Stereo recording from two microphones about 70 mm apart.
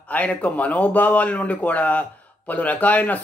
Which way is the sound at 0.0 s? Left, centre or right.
Centre.